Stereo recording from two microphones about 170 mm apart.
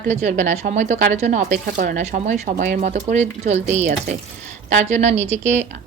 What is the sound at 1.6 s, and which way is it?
Speech, 55° right (ahead or behind).